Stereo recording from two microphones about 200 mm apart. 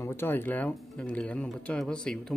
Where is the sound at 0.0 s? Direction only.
10° left (ahead or behind).